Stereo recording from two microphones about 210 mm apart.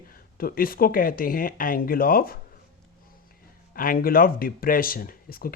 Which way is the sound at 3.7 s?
45° left (ahead or behind).